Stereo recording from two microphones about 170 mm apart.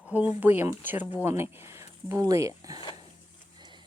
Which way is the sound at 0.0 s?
10° right (ahead or behind).